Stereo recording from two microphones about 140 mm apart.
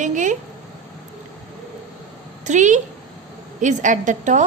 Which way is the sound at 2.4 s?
60° right (ahead or behind).